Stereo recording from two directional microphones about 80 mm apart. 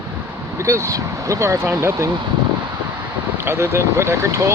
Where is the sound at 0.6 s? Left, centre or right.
Right.